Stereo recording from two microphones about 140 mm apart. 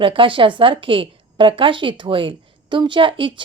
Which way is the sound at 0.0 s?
40° right (ahead or behind).